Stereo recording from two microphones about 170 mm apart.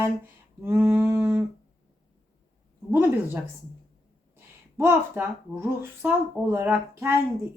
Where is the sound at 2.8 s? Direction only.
15° right (ahead or behind).